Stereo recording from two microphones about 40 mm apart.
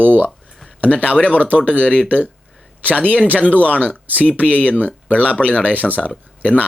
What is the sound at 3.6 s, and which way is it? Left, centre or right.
Speech, left.